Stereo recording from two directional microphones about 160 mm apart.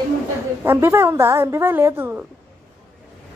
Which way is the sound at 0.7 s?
15° right (ahead or behind).